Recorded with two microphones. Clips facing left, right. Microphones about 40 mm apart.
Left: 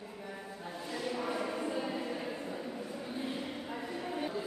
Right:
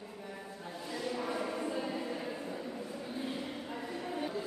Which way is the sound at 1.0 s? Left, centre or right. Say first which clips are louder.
Even; centre.